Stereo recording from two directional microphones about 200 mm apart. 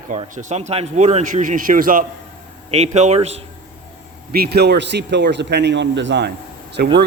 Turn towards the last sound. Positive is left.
turn(degrees=-55)  # may be behind; listen again after turning